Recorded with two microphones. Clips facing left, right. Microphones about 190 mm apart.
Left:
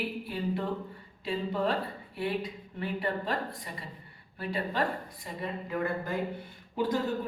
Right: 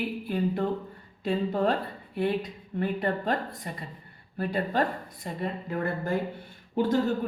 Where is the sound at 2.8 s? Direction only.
45° right (ahead or behind).